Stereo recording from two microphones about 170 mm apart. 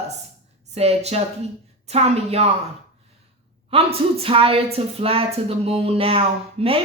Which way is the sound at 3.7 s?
35° right (ahead or behind).